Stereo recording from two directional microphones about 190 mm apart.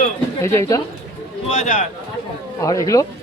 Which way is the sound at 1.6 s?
40° left (ahead or behind).